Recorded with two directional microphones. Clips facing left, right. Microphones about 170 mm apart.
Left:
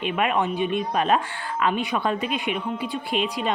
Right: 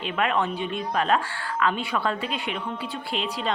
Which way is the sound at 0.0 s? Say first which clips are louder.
Left 2 dB; 15° left (ahead or behind).